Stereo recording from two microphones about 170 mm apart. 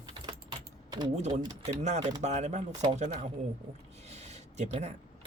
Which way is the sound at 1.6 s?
45° right (ahead or behind).